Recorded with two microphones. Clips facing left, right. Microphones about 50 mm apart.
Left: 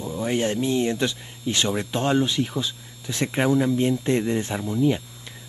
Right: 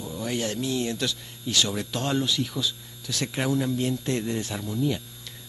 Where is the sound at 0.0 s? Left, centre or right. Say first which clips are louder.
Left 5 dB; left.